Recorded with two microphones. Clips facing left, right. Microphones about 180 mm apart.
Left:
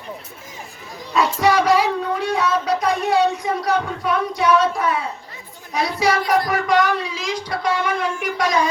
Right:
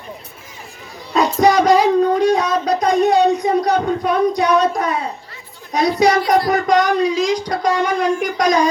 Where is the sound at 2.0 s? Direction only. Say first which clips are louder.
Right 7 dB; 35° right (ahead or behind).